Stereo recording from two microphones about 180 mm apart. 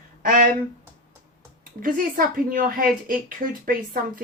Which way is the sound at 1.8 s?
50° right (ahead or behind).